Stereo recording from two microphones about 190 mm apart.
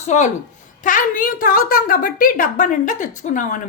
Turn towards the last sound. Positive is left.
turn(degrees=40)  # may be behind; listen again after turning